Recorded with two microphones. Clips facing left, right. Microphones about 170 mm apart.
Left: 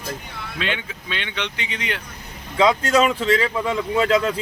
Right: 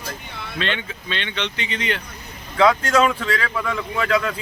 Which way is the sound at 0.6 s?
10° left (ahead or behind).